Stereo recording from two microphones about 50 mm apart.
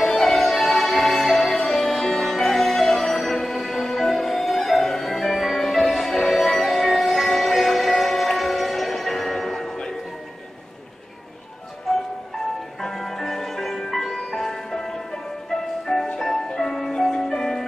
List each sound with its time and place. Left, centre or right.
0.0 s music: centre
12.8 s music: centre